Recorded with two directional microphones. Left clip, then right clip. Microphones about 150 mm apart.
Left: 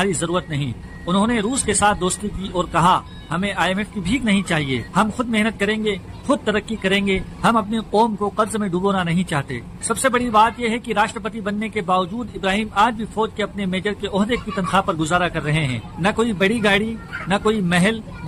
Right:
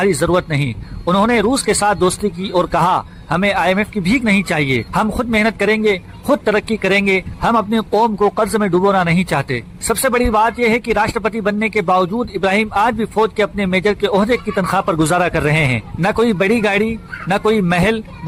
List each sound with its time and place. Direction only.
0.0 s a man's voice: 35° right (ahead or behind)